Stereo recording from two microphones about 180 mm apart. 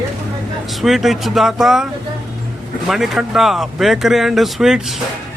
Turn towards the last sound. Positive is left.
turn(degrees=0)  # may be behind; listen again after turning